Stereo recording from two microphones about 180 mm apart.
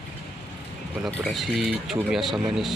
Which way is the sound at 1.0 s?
Centre (ahead or behind).